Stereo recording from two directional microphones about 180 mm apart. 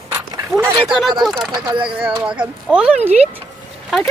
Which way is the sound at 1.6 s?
30° right (ahead or behind).